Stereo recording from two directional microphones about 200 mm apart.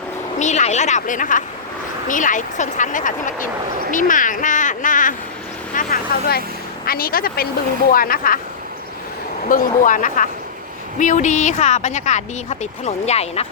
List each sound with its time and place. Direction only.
0.3 s a woman's voice: 35° left (ahead or behind)
5.7 s vehicle: 45° left (ahead or behind)
6.8 s a woman's voice: 50° left (ahead or behind)
9.5 s a woman's voice: 40° left (ahead or behind)